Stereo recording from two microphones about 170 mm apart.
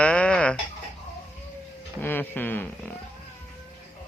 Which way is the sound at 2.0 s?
10° left (ahead or behind).